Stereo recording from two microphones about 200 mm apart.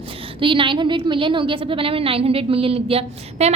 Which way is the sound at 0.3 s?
25° right (ahead or behind).